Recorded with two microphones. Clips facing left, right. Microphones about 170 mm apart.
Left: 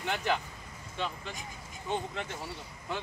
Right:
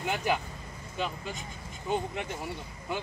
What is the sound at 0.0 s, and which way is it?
Speech, 10° right (ahead or behind).